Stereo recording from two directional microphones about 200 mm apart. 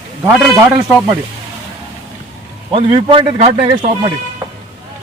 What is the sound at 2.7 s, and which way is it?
Speech, 25° right (ahead or behind).